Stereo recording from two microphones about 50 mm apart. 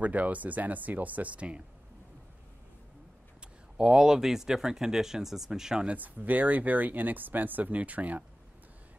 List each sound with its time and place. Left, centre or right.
0.0 s speech: right
3.7 s speech: centre
5.9 s speech: right